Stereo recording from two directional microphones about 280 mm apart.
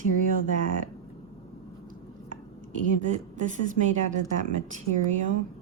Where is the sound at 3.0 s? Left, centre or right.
Right.